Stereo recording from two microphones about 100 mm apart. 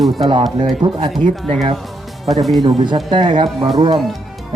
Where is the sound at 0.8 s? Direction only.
50° right (ahead or behind).